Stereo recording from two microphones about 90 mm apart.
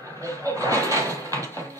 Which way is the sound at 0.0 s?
35° right (ahead or behind).